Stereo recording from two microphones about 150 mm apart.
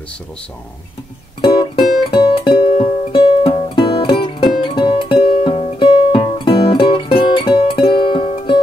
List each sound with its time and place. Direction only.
1.4 s music: 30° left (ahead or behind)